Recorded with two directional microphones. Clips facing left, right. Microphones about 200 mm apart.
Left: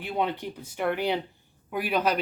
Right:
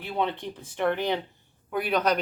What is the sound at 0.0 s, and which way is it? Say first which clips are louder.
Speech: even; 10° left (ahead or behind).